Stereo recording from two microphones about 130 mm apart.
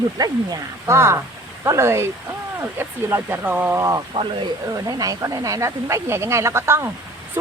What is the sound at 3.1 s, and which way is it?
Speech, 15° right (ahead or behind).